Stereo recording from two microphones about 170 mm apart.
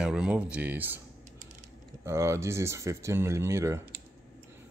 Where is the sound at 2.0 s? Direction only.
15° right (ahead or behind).